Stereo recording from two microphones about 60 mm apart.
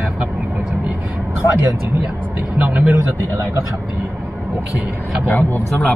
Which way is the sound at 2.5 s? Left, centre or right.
Right.